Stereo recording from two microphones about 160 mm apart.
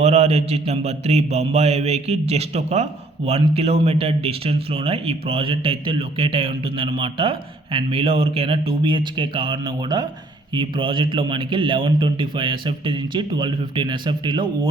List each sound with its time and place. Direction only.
0.0 s speech: 40° right (ahead or behind)